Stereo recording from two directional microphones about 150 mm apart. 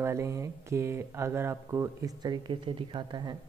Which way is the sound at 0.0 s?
20° right (ahead or behind).